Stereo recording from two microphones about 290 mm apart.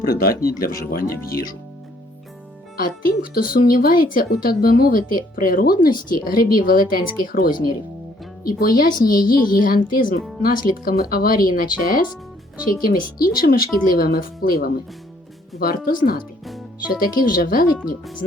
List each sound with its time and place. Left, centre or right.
0.2 s speech: left
2.7 s speech: left
16.5 s music: centre
17.2 s speech: left